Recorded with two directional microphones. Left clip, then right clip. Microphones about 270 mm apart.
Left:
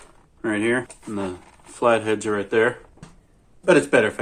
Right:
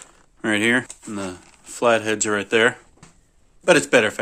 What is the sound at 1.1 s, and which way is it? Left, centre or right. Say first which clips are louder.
A man's voice: left 1 dB; right.